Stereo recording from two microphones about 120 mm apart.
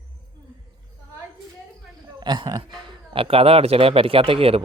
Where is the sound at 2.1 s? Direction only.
35° right (ahead or behind).